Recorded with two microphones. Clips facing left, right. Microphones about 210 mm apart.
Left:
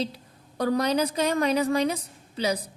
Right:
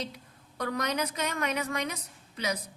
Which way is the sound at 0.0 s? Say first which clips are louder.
Left 7 dB; 30° left (ahead or behind).